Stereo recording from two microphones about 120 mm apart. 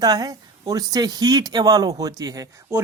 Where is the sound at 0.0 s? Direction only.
30° right (ahead or behind).